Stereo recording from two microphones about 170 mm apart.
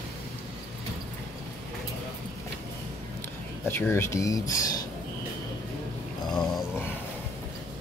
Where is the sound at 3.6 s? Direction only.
15° left (ahead or behind).